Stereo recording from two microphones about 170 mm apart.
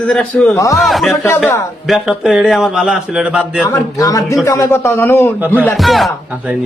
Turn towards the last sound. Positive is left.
turn(degrees=0)  # may be behind; listen again after turning